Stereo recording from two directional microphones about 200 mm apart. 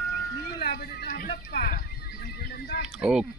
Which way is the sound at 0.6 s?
50° left (ahead or behind).